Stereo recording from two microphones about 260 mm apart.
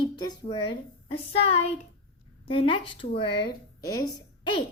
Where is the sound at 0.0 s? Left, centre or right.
Centre.